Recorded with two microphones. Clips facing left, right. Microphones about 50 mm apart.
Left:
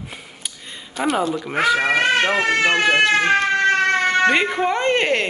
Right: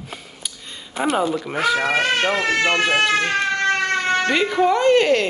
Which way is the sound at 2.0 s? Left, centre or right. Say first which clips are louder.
Left 2 dB; left.